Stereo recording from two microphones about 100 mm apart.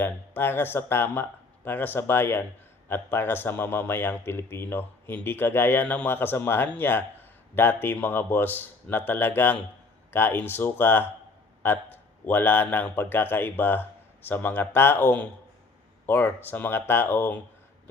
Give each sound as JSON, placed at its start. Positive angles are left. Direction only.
{"t": 0.0, "sound": "a man's voice", "side_deg": 20}